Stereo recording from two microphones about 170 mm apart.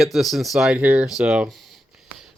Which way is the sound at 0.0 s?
Centre (ahead or behind).